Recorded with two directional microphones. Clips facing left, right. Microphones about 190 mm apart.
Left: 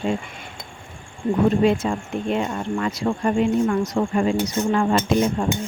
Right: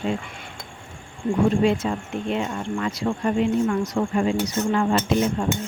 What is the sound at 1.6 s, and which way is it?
Speech, 50° left (ahead or behind).